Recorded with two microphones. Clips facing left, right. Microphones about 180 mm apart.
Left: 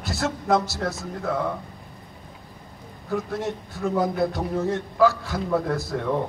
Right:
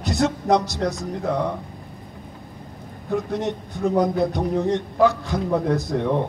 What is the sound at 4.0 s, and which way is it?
A man's voice, 20° right (ahead or behind).